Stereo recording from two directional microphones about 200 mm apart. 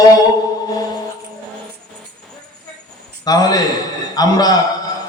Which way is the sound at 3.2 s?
20° left (ahead or behind).